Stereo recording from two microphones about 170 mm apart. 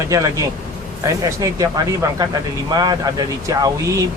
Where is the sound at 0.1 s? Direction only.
20° right (ahead or behind).